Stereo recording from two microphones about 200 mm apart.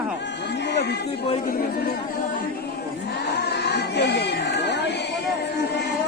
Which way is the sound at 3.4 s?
55° left (ahead or behind).